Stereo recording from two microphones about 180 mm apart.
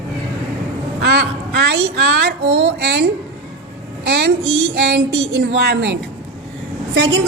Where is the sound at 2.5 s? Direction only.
70° right (ahead or behind).